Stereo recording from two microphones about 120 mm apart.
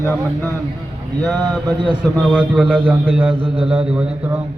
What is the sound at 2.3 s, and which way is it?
A man's voice, 10° right (ahead or behind).